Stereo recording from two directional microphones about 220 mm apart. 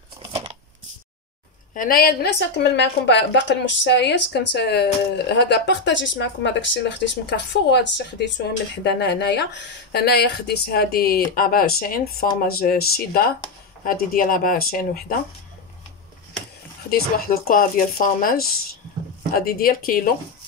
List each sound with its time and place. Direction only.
0.3 s a sound: 25° right (ahead or behind)
1.7 s speech: 40° left (ahead or behind)
16.9 s speech: 45° left (ahead or behind)